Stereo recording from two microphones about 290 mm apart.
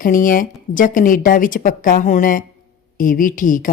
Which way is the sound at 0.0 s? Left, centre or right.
Left.